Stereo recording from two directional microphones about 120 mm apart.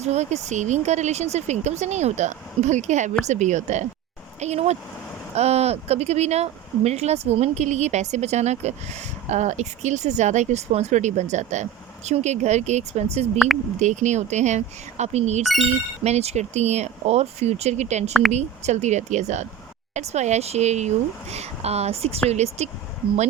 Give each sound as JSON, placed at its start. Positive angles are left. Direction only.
{"t": 0.0, "sound": "speech", "side_deg": -70}
{"t": 4.4, "sound": "speech", "side_deg": -65}
{"t": 13.7, "sound": "speech", "side_deg": -80}